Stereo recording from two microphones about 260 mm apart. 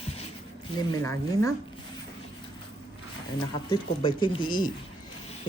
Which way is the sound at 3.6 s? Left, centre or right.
Centre.